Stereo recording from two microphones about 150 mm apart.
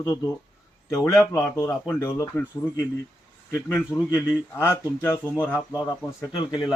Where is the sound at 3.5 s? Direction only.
20° left (ahead or behind).